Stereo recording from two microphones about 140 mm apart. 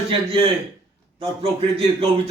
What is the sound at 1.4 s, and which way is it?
Speech, 45° right (ahead or behind).